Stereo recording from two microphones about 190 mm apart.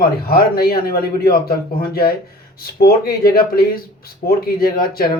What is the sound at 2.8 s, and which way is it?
Speech, 50° left (ahead or behind).